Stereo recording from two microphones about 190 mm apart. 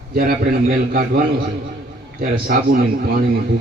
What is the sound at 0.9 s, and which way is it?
Speech, 50° right (ahead or behind).